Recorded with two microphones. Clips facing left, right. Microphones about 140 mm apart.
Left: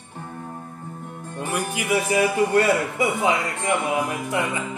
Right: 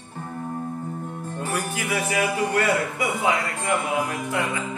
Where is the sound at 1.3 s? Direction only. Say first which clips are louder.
Left 2 dB; 15° left (ahead or behind).